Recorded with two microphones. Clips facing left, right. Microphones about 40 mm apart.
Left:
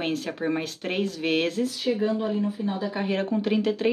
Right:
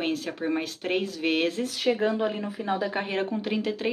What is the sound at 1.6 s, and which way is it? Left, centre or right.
Speech, right.